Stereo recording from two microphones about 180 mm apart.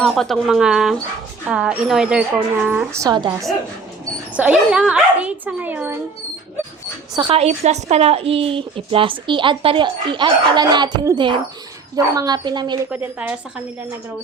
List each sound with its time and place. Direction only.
0.0 s speech: centre (ahead or behind)
3.1 s speech: 25° right (ahead or behind)
4.4 s speech: 5° right (ahead or behind)
7.2 s speech: 30° right (ahead or behind)
12.9 s speech: 10° right (ahead or behind)